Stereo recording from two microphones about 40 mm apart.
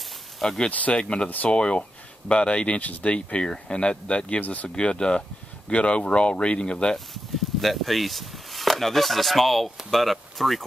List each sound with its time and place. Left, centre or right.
0.4 s speech: centre
0.7 s speech: left
0.9 s speech: left
4.7 s speech: left
7.6 s speech: centre